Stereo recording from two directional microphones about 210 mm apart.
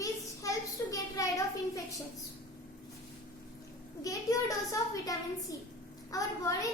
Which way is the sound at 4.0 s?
15° left (ahead or behind).